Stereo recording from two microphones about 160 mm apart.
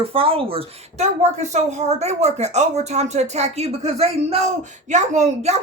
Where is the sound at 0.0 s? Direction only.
35° right (ahead or behind).